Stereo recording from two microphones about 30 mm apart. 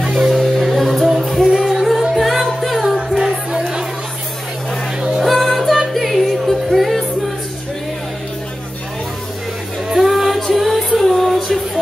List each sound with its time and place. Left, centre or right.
0.3 s music: centre
1.6 s music: centre
1.9 s music: centre
3.2 s music: centre
5.2 s music: centre
9.9 s music: centre